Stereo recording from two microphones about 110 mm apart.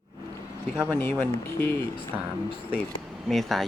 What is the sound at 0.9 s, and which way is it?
Speech, 20° left (ahead or behind).